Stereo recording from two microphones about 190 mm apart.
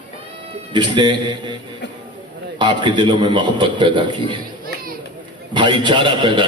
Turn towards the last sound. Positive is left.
turn(degrees=-25)  # may be behind; listen again after turning